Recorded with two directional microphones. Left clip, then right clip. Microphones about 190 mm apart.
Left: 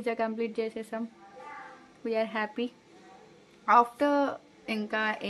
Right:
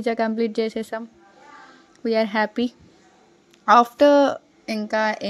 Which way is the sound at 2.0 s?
40° right (ahead or behind).